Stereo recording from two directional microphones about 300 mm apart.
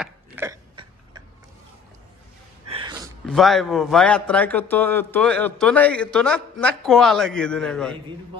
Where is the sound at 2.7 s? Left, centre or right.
Centre.